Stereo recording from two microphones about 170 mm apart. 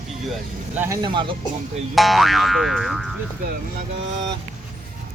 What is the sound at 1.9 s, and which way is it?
A man's voice, centre (ahead or behind).